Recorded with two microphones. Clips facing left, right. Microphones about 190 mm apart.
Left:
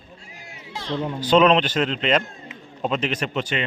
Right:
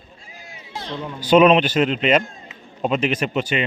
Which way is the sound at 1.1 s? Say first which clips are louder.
Right 3 dB; 10° right (ahead or behind).